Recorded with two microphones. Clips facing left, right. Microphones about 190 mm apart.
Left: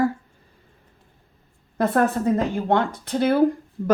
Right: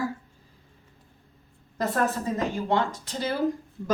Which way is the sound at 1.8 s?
60° left (ahead or behind).